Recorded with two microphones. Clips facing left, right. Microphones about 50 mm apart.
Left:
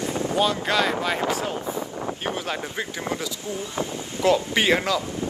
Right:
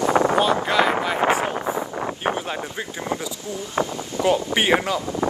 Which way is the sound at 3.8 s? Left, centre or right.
Right.